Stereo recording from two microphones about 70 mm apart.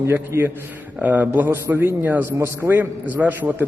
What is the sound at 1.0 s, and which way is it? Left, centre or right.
A man's voice, right.